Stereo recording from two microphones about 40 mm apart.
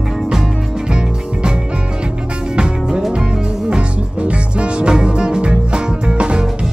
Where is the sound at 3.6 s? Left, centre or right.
Right.